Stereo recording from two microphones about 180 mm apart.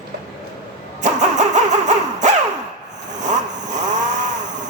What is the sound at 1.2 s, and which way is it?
Music, 40° right (ahead or behind).